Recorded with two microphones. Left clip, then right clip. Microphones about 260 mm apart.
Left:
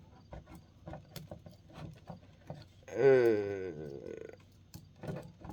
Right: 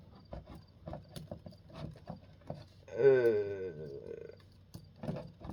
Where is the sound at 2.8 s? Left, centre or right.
Left.